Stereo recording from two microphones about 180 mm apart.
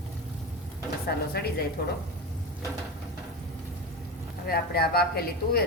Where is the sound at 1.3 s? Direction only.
60° left (ahead or behind).